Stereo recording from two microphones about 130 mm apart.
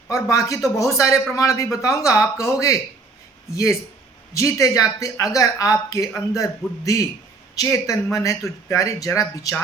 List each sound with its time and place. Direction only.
0.1 s speech: 25° left (ahead or behind)